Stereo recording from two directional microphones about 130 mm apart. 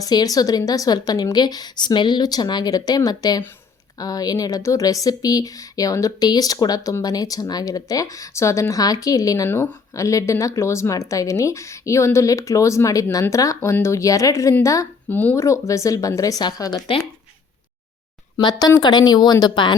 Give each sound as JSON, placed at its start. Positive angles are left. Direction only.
{"t": 0.0, "sound": "a woman's voice", "side_deg": 30}
{"t": 18.3, "sound": "a woman's voice", "side_deg": 30}